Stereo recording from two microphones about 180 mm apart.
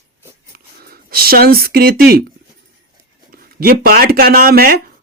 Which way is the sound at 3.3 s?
55° right (ahead or behind).